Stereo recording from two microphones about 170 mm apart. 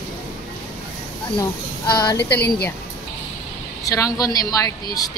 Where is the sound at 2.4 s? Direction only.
70° left (ahead or behind).